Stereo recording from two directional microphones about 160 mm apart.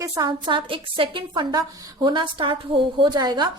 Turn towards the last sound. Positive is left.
turn(degrees=-25)  # may be behind; listen again after turning